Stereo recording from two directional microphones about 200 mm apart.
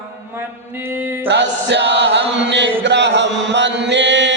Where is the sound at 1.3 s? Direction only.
60° right (ahead or behind).